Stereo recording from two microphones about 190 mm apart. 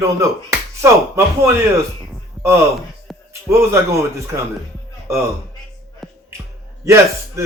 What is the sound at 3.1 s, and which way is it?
Music, centre (ahead or behind).